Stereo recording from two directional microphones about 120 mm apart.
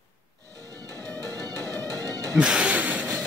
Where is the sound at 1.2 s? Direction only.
30° right (ahead or behind).